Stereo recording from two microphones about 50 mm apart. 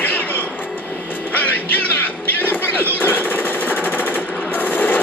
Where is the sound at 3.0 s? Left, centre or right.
Left.